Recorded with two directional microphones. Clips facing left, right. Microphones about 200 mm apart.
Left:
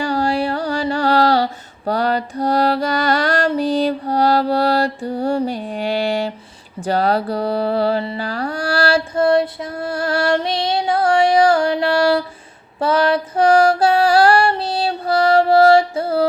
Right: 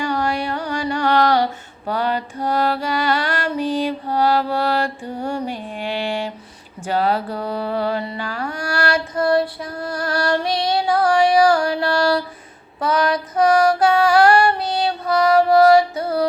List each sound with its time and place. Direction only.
0.0 s music: 30° left (ahead or behind)
6.7 s mantra: 40° left (ahead or behind)
12.8 s female singing: 30° left (ahead or behind)